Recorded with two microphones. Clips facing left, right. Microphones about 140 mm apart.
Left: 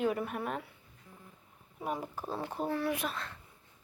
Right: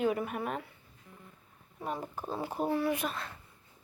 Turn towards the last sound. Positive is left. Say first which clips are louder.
# right 2 dB
turn(degrees=0)  # may be behind; listen again after turning